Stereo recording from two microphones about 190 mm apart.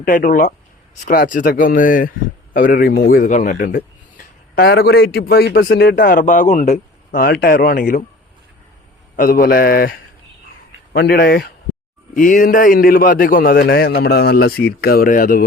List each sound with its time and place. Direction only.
0.0 s a man's voice: 45° left (ahead or behind)
9.1 s a man's voice: 50° left (ahead or behind)